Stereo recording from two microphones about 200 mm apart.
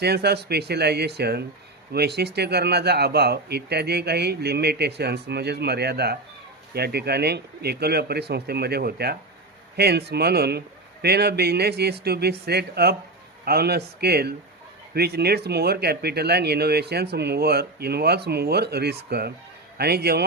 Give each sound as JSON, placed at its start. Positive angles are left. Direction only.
{"t": 0.0, "sound": "speech", "side_deg": -55}